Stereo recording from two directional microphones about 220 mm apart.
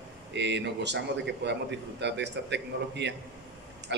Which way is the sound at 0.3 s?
50° right (ahead or behind).